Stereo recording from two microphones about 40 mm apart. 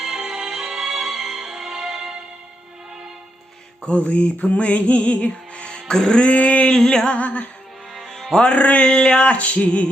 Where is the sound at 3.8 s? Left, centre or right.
Left.